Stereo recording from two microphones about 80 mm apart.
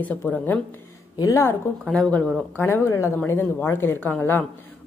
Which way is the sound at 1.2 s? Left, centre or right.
Left.